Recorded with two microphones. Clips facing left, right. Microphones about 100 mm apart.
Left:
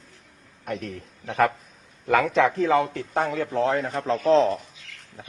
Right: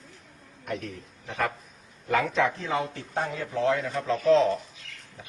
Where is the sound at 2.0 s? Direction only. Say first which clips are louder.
Left 5 dB; 90° left.